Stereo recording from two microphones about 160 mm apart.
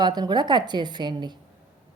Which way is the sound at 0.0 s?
25° right (ahead or behind).